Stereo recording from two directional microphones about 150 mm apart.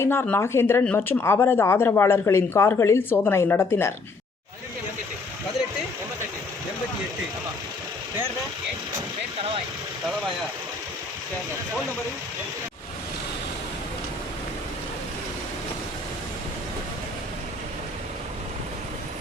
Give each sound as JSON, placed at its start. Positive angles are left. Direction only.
{"t": 0.0, "sound": "speech", "side_deg": 15}